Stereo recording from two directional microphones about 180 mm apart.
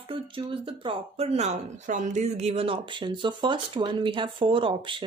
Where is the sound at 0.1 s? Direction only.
30° right (ahead or behind).